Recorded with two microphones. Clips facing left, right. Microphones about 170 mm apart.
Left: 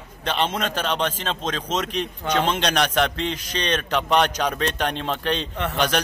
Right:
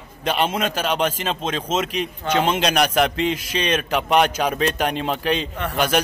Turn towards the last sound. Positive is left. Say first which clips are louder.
# right 2 dB
turn(degrees=-10)  # may be behind; listen again after turning